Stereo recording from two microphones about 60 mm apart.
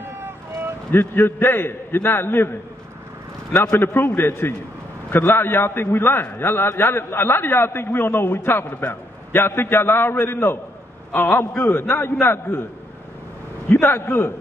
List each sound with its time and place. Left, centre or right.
0.0 s a sound: right
0.9 s a man's voice: left
3.7 s a man's voice: left
13.7 s a man's voice: left